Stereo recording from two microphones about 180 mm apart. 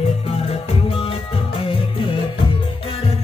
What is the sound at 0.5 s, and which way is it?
Music, 30° left (ahead or behind).